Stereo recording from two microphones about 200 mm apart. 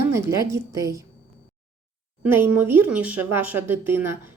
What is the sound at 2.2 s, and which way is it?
Speech, 10° right (ahead or behind).